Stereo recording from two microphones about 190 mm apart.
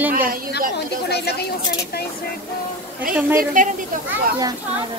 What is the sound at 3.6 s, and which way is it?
Speech, 45° right (ahead or behind).